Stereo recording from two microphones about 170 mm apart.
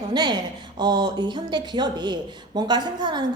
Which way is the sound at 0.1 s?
25° right (ahead or behind).